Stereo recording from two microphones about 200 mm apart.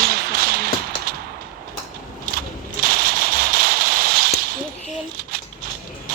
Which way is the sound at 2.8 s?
50° right (ahead or behind).